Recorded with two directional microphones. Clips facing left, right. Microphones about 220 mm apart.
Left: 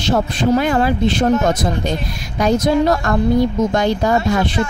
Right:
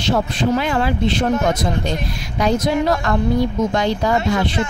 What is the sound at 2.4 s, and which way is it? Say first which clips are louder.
A woman's voice: left 3 dB; 45° left (ahead or behind).